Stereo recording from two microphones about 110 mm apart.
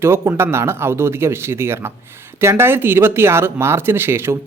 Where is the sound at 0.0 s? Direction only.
25° right (ahead or behind).